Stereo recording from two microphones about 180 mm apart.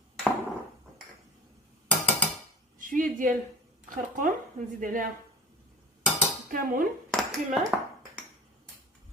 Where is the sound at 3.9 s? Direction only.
45° right (ahead or behind).